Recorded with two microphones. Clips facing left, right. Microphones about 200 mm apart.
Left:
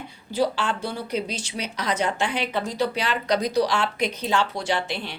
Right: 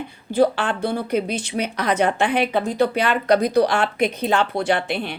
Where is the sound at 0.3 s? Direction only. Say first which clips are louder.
Right 5 dB; 55° right (ahead or behind).